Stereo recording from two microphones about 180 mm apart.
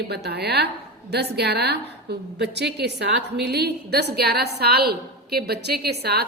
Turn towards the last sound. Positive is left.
turn(degrees=-65)  # may be behind; listen again after turning